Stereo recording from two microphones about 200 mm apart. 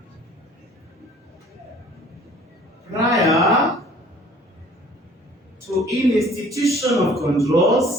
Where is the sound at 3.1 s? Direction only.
Centre (ahead or behind).